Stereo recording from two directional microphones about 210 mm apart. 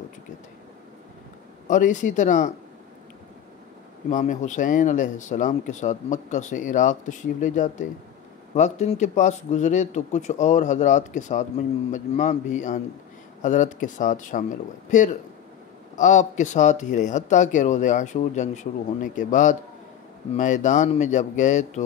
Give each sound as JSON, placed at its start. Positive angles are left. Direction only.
{"t": 1.7, "sound": "speech", "side_deg": 35}
{"t": 4.1, "sound": "speech", "side_deg": 35}